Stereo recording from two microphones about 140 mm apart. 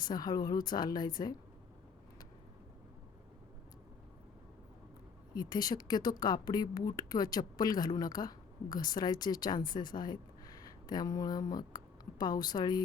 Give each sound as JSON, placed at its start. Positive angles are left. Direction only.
{"t": 0.1, "sound": "speech", "side_deg": 30}
{"t": 5.3, "sound": "speech", "side_deg": 30}